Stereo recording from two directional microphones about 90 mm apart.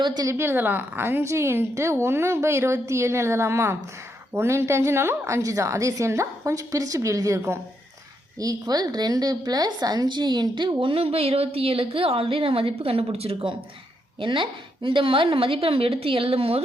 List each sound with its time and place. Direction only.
0.3 s a woman's voice: 30° right (ahead or behind)
8.4 s a woman's voice: 45° right (ahead or behind); by 13.6 s 80° right
14.2 s a woman's voice: 65° right (ahead or behind); by 16.6 s 90° right